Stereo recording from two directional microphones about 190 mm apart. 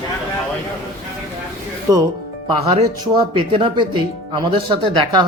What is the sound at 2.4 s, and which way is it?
Speech, 30° right (ahead or behind).